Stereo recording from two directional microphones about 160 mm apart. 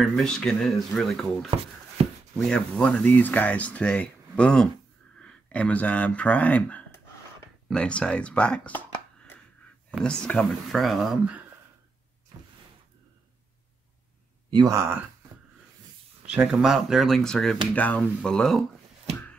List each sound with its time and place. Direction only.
0.0 s speech: centre (ahead or behind)
9.9 s speech: 5° left (ahead or behind)
14.5 s speech: 20° right (ahead or behind)
16.3 s speech: 5° right (ahead or behind)